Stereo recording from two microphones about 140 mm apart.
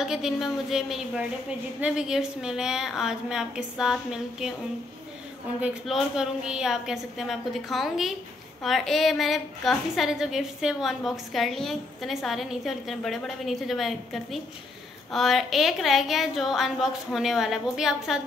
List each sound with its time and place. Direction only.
0.0 s a woman's voice: 5° right (ahead or behind)
5.6 s a woman's voice: 5° right (ahead or behind)